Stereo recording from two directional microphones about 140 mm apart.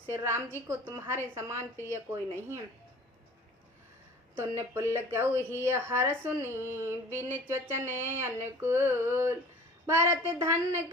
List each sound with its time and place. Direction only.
0.1 s speech: 20° right (ahead or behind)
4.4 s speech: 15° right (ahead or behind)